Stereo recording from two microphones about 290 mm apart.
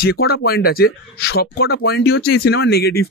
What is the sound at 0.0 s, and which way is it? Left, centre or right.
Speech, left.